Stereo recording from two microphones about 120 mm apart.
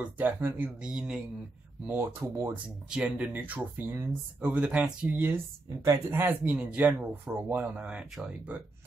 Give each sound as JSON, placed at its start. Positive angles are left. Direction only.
{"t": 0.0, "sound": "speech", "side_deg": -15}
{"t": 1.9, "sound": "speech", "side_deg": -20}
{"t": 2.9, "sound": "speech", "side_deg": -10}